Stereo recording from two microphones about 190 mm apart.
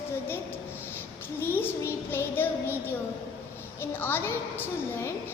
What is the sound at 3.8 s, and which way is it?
A child's voice, 10° left (ahead or behind).